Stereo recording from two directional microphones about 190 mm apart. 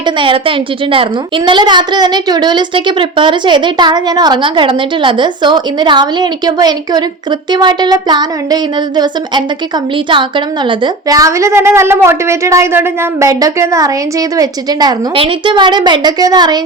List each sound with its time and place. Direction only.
0.0 s a woman's voice: 25° right (ahead or behind)